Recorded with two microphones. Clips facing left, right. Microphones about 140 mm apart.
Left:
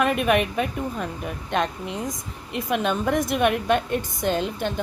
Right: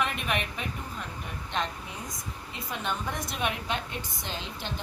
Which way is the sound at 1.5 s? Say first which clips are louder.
Left 8 dB; 65° left (ahead or behind).